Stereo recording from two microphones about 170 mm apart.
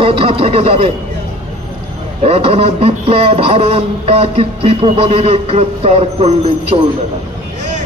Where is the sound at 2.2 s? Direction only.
35° right (ahead or behind).